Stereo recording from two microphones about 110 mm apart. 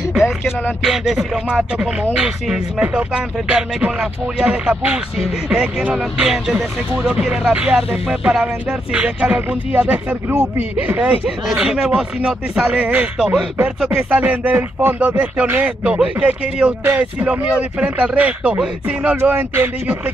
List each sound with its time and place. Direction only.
0.8 s speech: 5° right (ahead or behind); by 20.0 s 20° right (ahead or behind)